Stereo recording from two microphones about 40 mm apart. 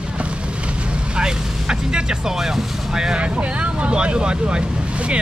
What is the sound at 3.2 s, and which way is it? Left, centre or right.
Speech, right.